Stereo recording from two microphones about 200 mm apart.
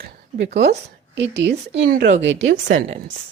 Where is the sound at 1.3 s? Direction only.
60° right (ahead or behind).